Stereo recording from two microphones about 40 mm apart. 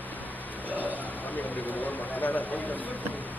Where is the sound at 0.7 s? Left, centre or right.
Left.